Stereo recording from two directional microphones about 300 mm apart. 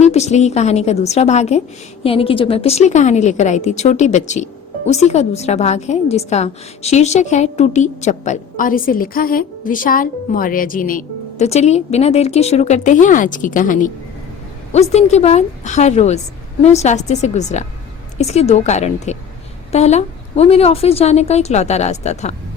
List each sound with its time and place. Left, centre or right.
0.0 s a woman's voice: left